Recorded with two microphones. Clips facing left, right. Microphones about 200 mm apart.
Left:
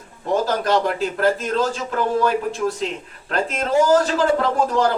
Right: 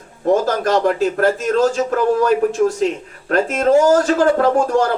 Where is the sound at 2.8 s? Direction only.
50° right (ahead or behind).